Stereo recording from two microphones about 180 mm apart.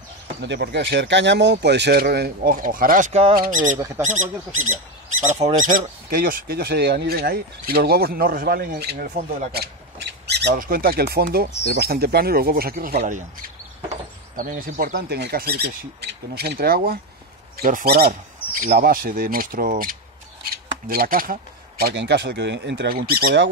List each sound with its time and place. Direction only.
0.4 s speech: 70° right (ahead or behind); by 3.1 s 50° right (ahead or behind)
3.1 s speech: 35° right (ahead or behind)
3.3 s speech: 50° right (ahead or behind)
3.7 s speech: 15° right (ahead or behind)
4.0 s speech: 45° right (ahead or behind); by 9.0 s 60° right (ahead or behind)
9.0 s speech: 45° right (ahead or behind)
9.5 s squawk: 65° right (ahead or behind)
10.5 s speech: 50° right (ahead or behind)
14.3 s speech: 50° right (ahead or behind); by 22.9 s 70° right (ahead or behind)
22.9 s speech: 60° right (ahead or behind)